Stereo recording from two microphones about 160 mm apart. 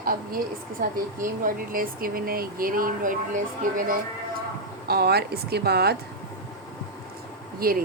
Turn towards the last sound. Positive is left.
turn(degrees=-70)  # may be behind; listen again after turning